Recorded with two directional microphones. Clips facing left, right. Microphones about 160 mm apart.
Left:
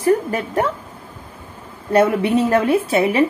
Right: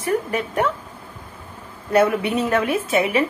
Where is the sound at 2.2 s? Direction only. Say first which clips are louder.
Left 4 dB; 35° left (ahead or behind).